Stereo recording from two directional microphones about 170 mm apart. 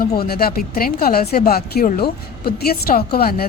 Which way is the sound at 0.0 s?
65° left (ahead or behind).